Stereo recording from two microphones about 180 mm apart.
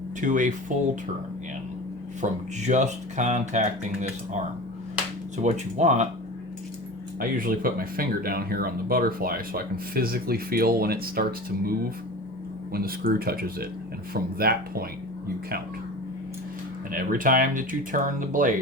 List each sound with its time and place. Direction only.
0.2 s speech: 45° right (ahead or behind)
2.2 s speech: 40° right (ahead or behind)
5.4 s speech: 40° right (ahead or behind)
7.2 s speech: 50° right (ahead or behind)
12.7 s speech: 55° right (ahead or behind)
16.9 s speech: 50° right (ahead or behind)